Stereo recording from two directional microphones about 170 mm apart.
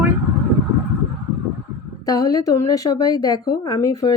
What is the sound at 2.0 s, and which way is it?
A woman's voice, 20° left (ahead or behind).